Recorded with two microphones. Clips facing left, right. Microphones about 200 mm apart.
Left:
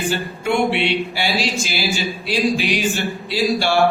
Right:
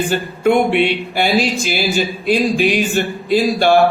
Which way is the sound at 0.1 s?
50° right (ahead or behind).